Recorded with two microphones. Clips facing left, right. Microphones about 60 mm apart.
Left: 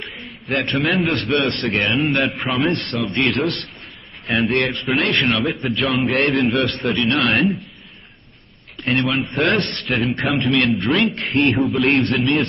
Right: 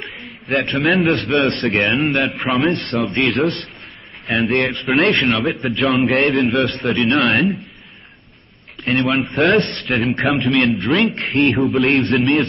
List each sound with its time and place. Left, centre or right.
0.5 s a man's voice: centre
1.5 s a man's voice: right
1.8 s a man's voice: centre
8.8 s a man's voice: centre